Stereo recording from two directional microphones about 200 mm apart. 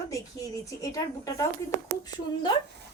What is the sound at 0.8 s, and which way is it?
Speech, 15° left (ahead or behind).